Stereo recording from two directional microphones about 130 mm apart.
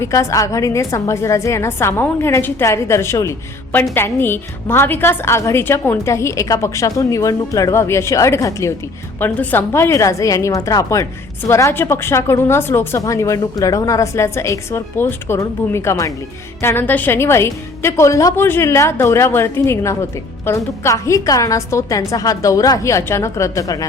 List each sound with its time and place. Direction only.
0.0 s a woman's voice: 25° left (ahead or behind)